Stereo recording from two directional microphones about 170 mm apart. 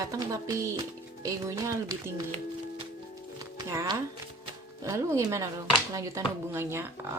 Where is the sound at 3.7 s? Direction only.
20° right (ahead or behind).